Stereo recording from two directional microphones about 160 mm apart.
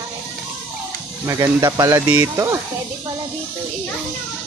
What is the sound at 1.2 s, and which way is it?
Speech, 20° right (ahead or behind).